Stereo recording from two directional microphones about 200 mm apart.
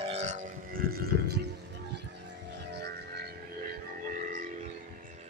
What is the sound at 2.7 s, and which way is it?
Music, 55° right (ahead or behind).